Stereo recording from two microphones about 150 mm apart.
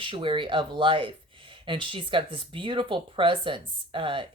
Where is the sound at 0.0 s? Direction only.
35° right (ahead or behind).